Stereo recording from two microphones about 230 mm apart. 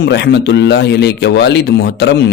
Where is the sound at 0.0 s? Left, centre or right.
Left.